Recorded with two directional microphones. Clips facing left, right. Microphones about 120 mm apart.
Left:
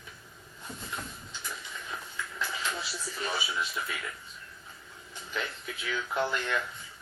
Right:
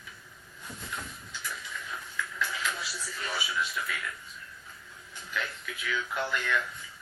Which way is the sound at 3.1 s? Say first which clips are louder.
Even; 25° left (ahead or behind).